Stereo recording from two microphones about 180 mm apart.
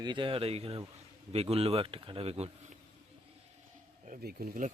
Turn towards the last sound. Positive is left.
turn(degrees=-45)  # may be behind; listen again after turning